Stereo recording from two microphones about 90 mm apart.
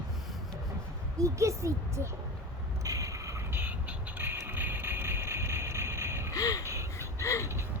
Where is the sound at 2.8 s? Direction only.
40° right (ahead or behind).